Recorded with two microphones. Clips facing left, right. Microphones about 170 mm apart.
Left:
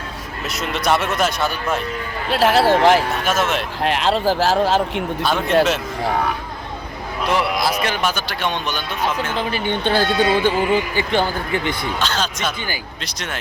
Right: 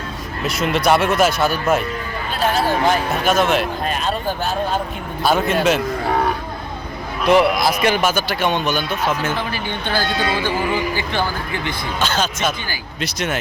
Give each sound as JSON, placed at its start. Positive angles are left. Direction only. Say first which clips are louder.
{"t": 0.4, "sound": "speech", "louder": "right 4 dB", "side_deg": 0}
{"t": 2.3, "sound": "speech", "louder": "left 4 dB", "side_deg": 85}
{"t": 3.2, "sound": "speech", "louder": "right 4 dB", "side_deg": 0}
{"t": 3.8, "sound": "speech", "louder": "left 4 dB", "side_deg": 85}
{"t": 5.2, "sound": "a man's voice", "louder": "right 4 dB", "side_deg": -10}
{"t": 7.3, "sound": "a man's voice", "louder": "right 6 dB", "side_deg": -15}
{"t": 9.5, "sound": "speech", "louder": "left 4 dB", "side_deg": 25}
{"t": 12.0, "sound": "speech", "louder": "right 5 dB", "side_deg": -5}